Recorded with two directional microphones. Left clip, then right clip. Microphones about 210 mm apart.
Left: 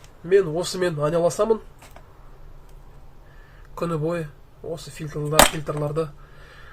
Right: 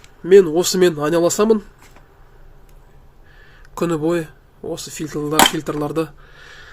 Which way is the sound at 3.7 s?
45° right (ahead or behind).